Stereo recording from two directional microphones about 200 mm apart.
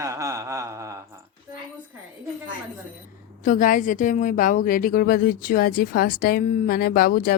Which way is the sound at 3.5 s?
40° left (ahead or behind).